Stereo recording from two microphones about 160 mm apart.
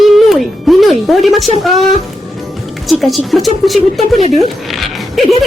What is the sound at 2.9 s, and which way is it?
Speech, centre (ahead or behind).